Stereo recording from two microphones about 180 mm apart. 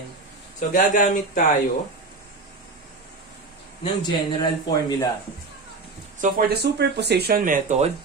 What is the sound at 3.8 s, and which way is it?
A man's voice, 25° left (ahead or behind).